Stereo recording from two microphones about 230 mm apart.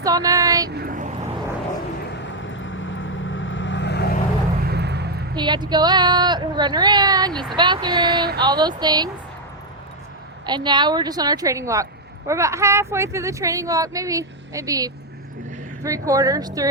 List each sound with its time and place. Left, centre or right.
0.0 s speech: centre
0.7 s vehicle: right
2.0 s vehicle: left
4.6 s vehicle: right
5.3 s speech: centre
10.4 s speech: centre